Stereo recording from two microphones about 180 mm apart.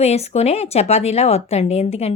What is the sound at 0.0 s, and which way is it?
A woman's voice, 35° left (ahead or behind).